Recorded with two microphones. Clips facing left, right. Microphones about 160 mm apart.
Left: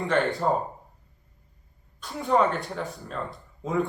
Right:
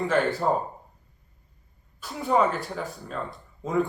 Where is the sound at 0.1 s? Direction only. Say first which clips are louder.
Left 1 dB; 5° right (ahead or behind).